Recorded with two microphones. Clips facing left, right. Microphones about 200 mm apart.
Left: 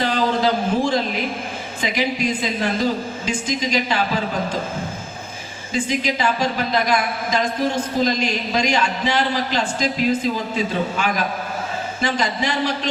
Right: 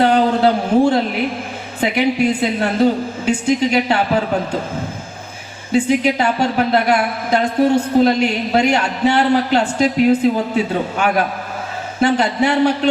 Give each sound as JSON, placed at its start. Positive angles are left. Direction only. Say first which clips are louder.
{"t": 0.0, "sound": "a sound", "louder": "right 6 dB", "side_deg": -60}
{"t": 1.8, "sound": "a woman's voice", "louder": "right 6 dB", "side_deg": -65}
{"t": 5.7, "sound": "a woman's voice", "louder": "right 7 dB", "side_deg": -65}